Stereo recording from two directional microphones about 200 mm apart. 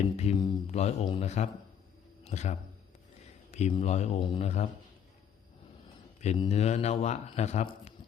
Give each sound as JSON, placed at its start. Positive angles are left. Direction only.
{"t": 0.2, "sound": "speech", "side_deg": 25}
{"t": 6.2, "sound": "speech", "side_deg": 30}